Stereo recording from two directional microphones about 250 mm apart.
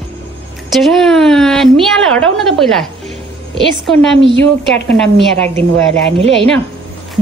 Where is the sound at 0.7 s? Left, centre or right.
Centre.